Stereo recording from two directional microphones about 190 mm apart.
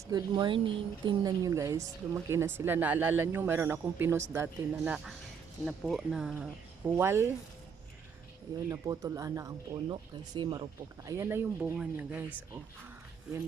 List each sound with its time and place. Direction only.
0.1 s speech: 20° right (ahead or behind)
8.7 s speech: 20° right (ahead or behind)